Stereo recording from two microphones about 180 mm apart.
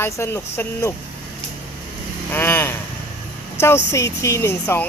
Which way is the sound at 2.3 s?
10° left (ahead or behind).